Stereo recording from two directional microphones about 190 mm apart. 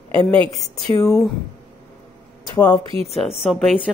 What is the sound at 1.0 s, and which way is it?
Speech, 15° left (ahead or behind).